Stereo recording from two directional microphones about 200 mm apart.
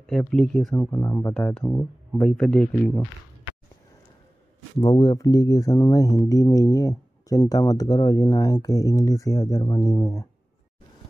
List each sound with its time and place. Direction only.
0.0 s speech: centre (ahead or behind)
4.7 s speech: 20° left (ahead or behind)